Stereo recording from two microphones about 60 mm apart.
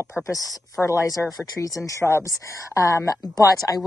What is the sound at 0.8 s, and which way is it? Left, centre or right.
Speech, left.